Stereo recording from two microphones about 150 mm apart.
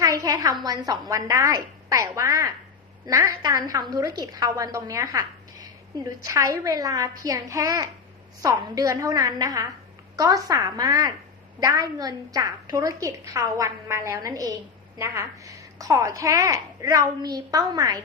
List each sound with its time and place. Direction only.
0.0 s a woman's voice: 25° right (ahead or behind)